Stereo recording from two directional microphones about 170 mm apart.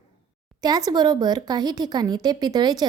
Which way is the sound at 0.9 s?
25° right (ahead or behind).